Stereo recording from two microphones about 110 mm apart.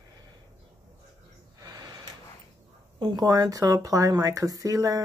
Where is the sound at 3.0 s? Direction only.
40° right (ahead or behind).